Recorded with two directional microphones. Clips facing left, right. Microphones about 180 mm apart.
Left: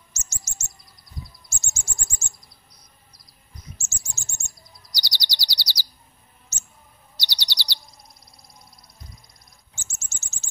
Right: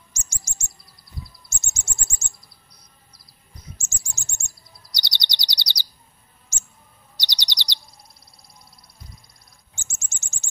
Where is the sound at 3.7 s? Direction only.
15° right (ahead or behind).